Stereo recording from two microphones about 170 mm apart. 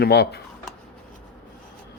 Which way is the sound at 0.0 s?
70° left (ahead or behind).